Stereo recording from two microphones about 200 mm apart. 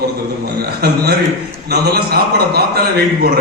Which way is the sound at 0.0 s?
50° right (ahead or behind).